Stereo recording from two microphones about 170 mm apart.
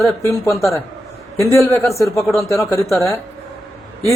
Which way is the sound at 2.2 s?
Centre (ahead or behind).